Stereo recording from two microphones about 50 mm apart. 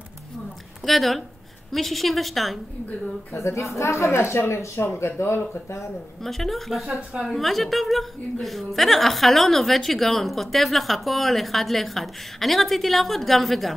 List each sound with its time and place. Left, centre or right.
0.8 s a woman's voice: centre
3.3 s a woman's voice: left
6.2 s a woman's voice: centre